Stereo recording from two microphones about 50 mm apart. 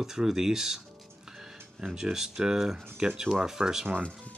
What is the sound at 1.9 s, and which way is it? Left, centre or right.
Speech, centre.